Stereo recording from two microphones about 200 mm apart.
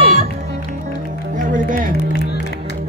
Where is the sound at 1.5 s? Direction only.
40° right (ahead or behind).